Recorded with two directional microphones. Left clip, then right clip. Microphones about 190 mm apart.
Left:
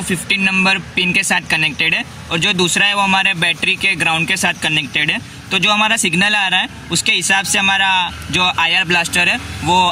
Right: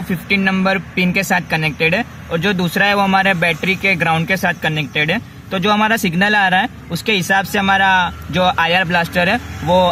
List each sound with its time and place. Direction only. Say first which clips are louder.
0.3 s speech: left 2 dB; 40° right (ahead or behind)